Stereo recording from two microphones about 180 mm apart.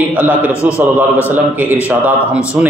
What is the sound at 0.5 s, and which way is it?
Speech, 15° left (ahead or behind).